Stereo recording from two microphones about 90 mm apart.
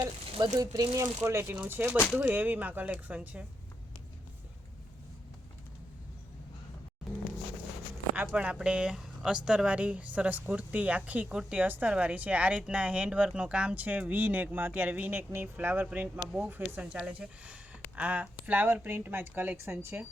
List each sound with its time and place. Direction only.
0.5 s speech: 45° right (ahead or behind); by 3.4 s 15° right (ahead or behind)
8.3 s speech: 10° right (ahead or behind); by 20.1 s 30° right (ahead or behind)